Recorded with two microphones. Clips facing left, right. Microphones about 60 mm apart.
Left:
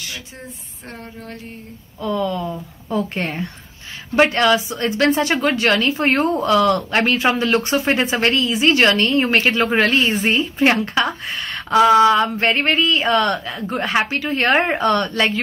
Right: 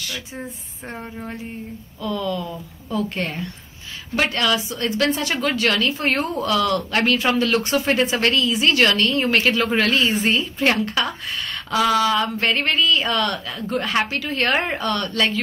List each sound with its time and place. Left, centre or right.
0.8 s speech: centre
2.0 s speech: left